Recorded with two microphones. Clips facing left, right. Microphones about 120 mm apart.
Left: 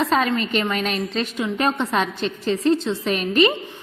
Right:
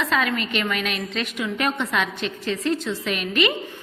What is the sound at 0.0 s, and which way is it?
A woman's voice, 30° left (ahead or behind).